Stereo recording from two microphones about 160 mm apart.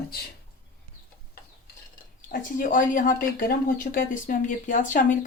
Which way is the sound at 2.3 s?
55° left (ahead or behind).